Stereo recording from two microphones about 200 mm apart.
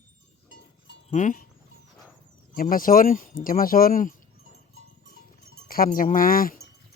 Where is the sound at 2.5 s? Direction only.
45° left (ahead or behind).